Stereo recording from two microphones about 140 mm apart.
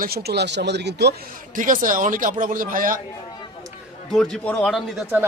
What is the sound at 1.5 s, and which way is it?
A man's voice, 70° right (ahead or behind).